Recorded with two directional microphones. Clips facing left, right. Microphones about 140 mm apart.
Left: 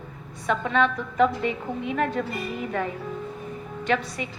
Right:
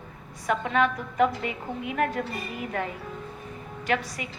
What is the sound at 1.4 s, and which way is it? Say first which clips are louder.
Speech: left 4 dB; 30° left (ahead or behind).